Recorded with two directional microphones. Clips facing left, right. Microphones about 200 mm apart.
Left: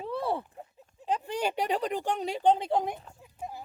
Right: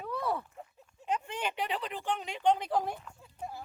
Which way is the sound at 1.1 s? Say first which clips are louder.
Left 4 dB; 40° left (ahead or behind).